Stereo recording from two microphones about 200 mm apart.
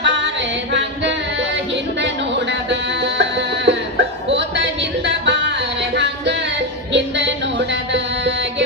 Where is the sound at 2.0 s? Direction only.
60° right (ahead or behind).